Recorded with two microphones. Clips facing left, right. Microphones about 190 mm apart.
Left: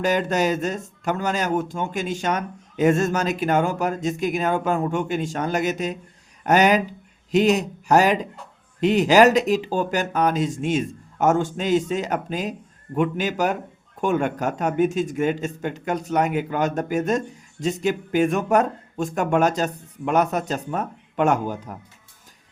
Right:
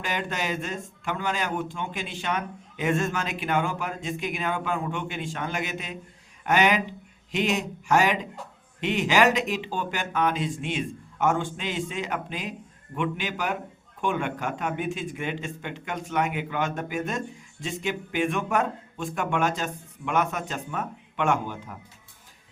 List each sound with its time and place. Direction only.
0.0 s speech: 40° left (ahead or behind)